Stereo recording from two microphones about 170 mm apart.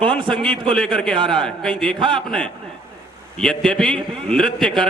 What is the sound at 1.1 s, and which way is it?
A man's voice, 30° right (ahead or behind).